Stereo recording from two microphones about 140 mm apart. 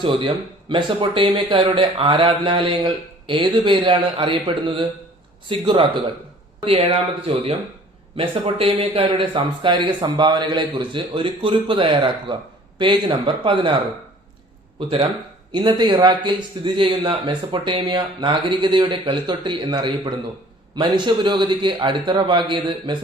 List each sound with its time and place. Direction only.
0.0 s speech: 35° right (ahead or behind)
6.7 s speech: 45° right (ahead or behind)
14.8 s speech: 40° right (ahead or behind)